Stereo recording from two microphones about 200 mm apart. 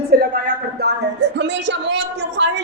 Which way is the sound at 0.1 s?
50° right (ahead or behind).